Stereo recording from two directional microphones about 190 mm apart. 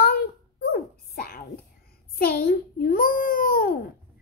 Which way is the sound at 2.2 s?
50° left (ahead or behind).